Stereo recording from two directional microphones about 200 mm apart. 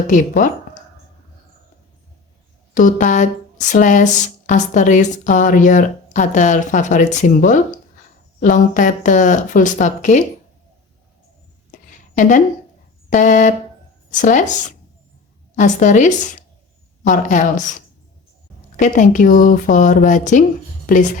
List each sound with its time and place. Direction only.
0.1 s speech: 40° left (ahead or behind)
2.7 s speech: 40° left (ahead or behind)
12.1 s speech: 40° left (ahead or behind)
13.1 s a sound: 40° left (ahead or behind)
14.1 s speech: 40° left (ahead or behind)